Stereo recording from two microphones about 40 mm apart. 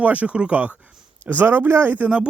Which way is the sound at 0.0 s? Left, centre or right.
Right.